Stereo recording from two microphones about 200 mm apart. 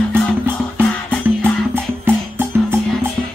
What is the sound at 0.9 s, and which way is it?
Music, 5° left (ahead or behind).